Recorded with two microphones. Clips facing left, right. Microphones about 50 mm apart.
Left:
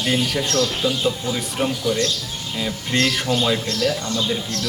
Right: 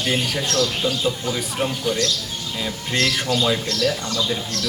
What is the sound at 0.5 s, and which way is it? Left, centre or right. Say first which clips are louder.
Speech: even; right.